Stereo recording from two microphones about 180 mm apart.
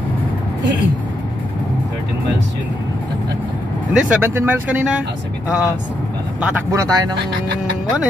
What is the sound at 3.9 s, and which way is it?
Speech, 10° right (ahead or behind).